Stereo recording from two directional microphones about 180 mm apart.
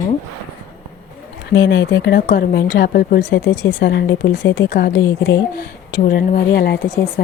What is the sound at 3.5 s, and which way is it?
Speech, 20° left (ahead or behind).